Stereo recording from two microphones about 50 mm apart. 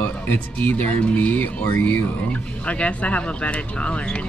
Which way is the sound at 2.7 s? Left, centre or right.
Left.